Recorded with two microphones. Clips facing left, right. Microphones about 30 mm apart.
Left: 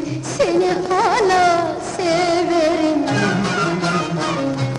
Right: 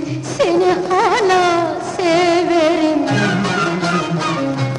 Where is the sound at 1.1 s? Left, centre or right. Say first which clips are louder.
Even; right.